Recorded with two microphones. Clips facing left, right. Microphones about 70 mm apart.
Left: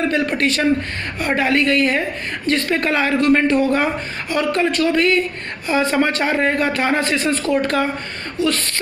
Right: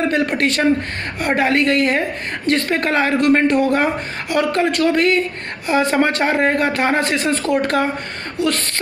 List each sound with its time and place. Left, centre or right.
0.1 s a woman's voice: right